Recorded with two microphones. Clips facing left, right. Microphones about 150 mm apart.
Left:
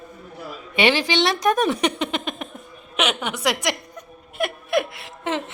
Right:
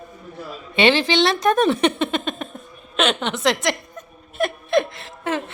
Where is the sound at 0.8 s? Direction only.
15° left (ahead or behind).